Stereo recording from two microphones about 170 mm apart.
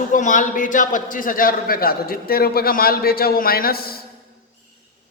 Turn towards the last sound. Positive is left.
turn(degrees=60)  # may be behind; listen again after turning